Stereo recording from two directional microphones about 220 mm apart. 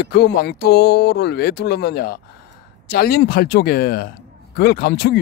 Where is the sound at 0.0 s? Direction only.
45° left (ahead or behind).